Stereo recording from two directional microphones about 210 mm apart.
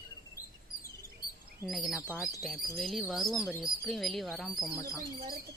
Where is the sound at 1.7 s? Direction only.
Centre (ahead or behind).